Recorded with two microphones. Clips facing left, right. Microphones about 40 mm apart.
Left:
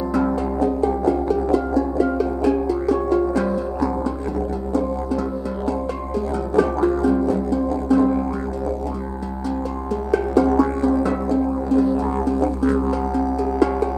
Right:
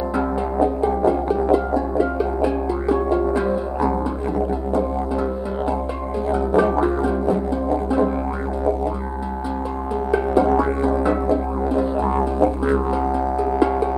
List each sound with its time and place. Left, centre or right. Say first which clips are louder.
0.1 s music: left 1 dB; right
6.3 s music: right 2 dB; right
10.1 s music: left 1 dB; right